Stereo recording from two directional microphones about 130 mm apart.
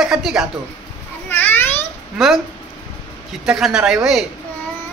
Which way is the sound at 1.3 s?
15° left (ahead or behind).